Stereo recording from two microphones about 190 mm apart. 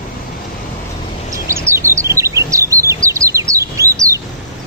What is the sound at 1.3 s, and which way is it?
Bird vocalization, 15° right (ahead or behind).